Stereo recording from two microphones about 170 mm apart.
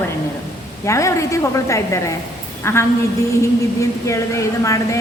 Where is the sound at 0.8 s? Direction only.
15° left (ahead or behind).